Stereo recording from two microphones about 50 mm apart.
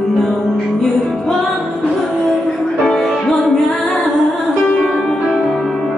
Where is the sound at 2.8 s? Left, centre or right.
Centre.